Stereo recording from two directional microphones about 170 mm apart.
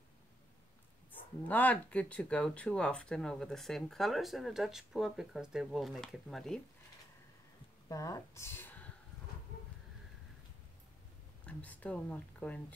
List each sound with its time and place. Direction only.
1.5 s speech: 10° left (ahead or behind)
7.9 s speech: 20° left (ahead or behind)
11.4 s speech: 10° left (ahead or behind)